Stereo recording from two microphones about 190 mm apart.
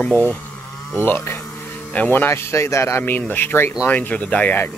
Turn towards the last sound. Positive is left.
turn(degrees=10)  # may be behind; listen again after turning